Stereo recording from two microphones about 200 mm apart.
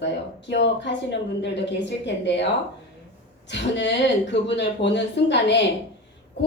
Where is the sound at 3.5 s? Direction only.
60° left (ahead or behind).